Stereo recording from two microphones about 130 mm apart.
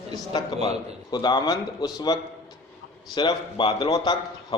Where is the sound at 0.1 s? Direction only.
35° left (ahead or behind).